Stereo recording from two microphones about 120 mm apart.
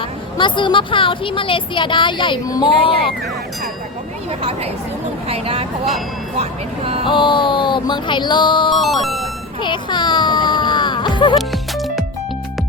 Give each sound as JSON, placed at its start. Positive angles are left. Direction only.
{"t": 0.3, "sound": "speech", "side_deg": 40}
{"t": 4.3, "sound": "speech", "side_deg": -60}
{"t": 7.0, "sound": "music", "side_deg": 45}
{"t": 8.8, "sound": "speech", "side_deg": 0}
{"t": 9.6, "sound": "speech", "side_deg": 40}
{"t": 11.3, "sound": "music", "side_deg": 0}